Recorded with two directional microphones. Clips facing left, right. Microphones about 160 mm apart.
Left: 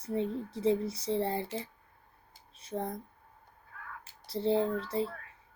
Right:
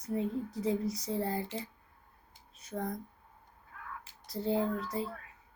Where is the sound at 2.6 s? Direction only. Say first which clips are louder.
Left 2 dB; 30° left (ahead or behind).